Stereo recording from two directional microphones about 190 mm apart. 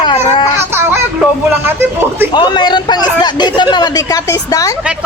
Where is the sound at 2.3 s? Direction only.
25° left (ahead or behind).